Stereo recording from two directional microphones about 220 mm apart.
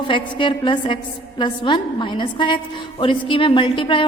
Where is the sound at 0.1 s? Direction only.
20° left (ahead or behind).